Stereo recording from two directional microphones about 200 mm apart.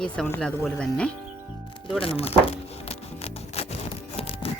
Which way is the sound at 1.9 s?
30° left (ahead or behind).